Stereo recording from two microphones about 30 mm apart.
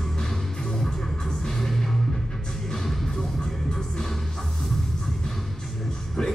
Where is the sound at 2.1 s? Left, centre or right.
Left.